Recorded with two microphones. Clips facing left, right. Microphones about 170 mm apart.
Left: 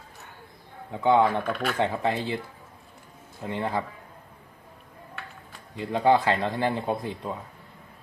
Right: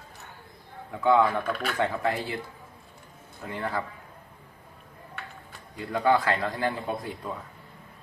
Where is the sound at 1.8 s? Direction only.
25° left (ahead or behind).